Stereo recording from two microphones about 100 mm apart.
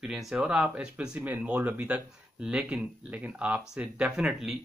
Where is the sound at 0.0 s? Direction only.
5° right (ahead or behind).